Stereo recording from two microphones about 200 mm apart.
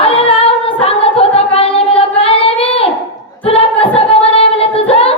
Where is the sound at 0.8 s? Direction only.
30° left (ahead or behind).